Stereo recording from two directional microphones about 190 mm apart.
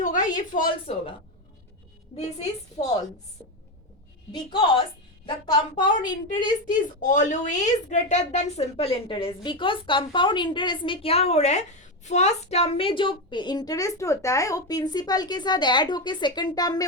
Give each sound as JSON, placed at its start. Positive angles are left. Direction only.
{"t": 0.0, "sound": "a woman's voice", "side_deg": 45}
{"t": 2.8, "sound": "a woman's voice", "side_deg": 35}
{"t": 4.4, "sound": "a woman's voice", "side_deg": 25}
{"t": 6.7, "sound": "a woman's voice", "side_deg": 45}